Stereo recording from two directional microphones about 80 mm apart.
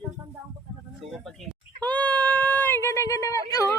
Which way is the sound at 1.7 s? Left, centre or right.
Centre.